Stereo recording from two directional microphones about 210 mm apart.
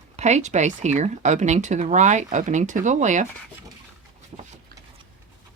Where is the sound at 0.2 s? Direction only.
35° right (ahead or behind).